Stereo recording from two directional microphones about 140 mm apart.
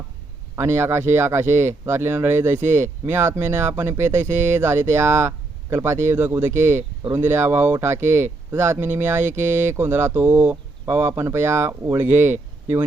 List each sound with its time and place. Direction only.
0.5 s speech: 20° right (ahead or behind)